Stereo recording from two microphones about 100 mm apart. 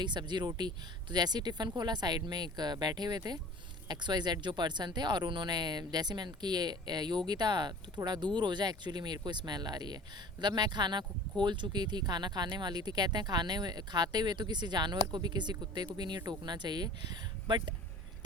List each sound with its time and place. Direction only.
0.0 s speech: 50° right (ahead or behind)